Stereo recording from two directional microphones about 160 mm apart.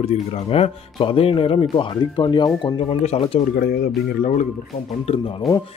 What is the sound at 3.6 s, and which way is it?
Speech, 80° left.